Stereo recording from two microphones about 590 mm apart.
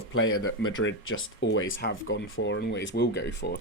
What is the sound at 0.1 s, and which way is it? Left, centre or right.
Speech, left.